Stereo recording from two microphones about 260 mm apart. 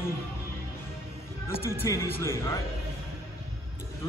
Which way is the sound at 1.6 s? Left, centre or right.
Centre.